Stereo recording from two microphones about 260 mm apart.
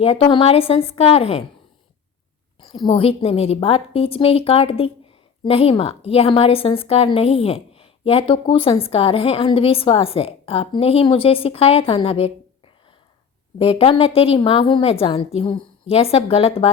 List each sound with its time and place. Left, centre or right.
0.0 s a woman's voice: left
2.6 s a woman's voice: centre
13.6 s a woman's voice: left